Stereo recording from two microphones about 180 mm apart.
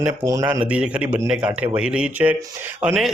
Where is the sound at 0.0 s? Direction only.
15° right (ahead or behind).